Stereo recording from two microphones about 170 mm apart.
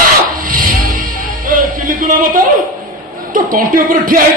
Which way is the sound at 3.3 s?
55° right (ahead or behind).